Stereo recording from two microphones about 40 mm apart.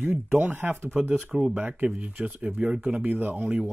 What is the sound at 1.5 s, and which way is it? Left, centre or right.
Speech, right.